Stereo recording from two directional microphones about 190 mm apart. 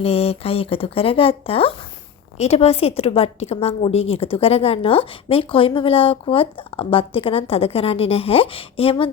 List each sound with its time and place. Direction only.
0.0 s a woman's voice: 30° left (ahead or behind)